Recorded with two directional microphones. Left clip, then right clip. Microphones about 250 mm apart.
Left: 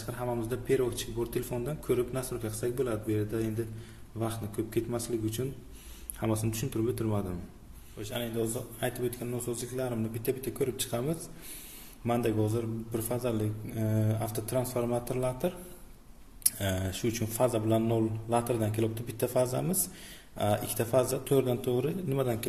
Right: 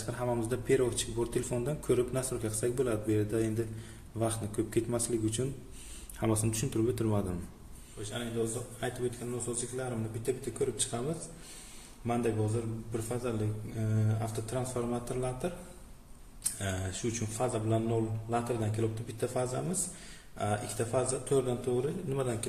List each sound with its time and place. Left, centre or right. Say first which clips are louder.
0.0 s speech: right 1 dB; centre
8.0 s a man's voice: left 2 dB; left
16.5 s a man's voice: left 4 dB; left